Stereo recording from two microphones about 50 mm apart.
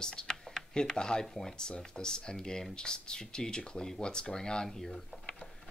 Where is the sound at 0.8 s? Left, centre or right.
Centre.